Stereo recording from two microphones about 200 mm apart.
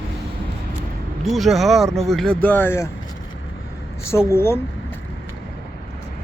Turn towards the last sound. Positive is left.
turn(degrees=10)  # may be behind; listen again after turning